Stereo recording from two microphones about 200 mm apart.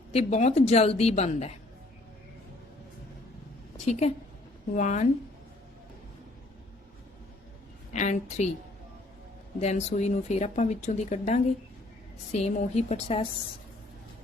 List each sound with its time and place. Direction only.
0.1 s speech: 35° left (ahead or behind)
3.8 s a woman's voice: 35° left (ahead or behind)
7.9 s speech: 35° left (ahead or behind)
9.6 s speech: 35° left (ahead or behind)